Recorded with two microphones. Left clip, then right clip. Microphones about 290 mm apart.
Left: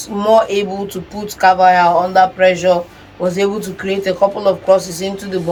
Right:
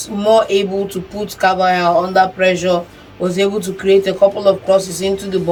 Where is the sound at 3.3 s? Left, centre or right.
Centre.